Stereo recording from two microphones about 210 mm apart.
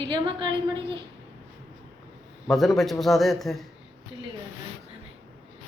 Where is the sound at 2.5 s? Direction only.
Centre (ahead or behind).